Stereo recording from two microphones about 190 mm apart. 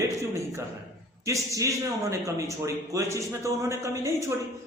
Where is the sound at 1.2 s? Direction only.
15° right (ahead or behind).